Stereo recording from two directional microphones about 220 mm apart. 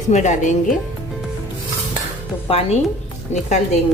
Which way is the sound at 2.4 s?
25° left (ahead or behind).